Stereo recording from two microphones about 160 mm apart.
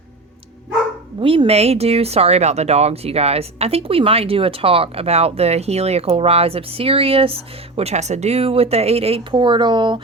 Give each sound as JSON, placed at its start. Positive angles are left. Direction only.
{"t": 1.2, "sound": "speech", "side_deg": -35}